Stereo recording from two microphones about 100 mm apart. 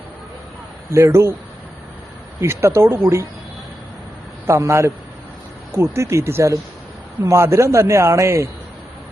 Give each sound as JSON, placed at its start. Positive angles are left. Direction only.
{"t": 0.9, "sound": "a man's voice", "side_deg": -30}
{"t": 2.4, "sound": "a man's voice", "side_deg": -25}
{"t": 4.4, "sound": "a man's voice", "side_deg": -25}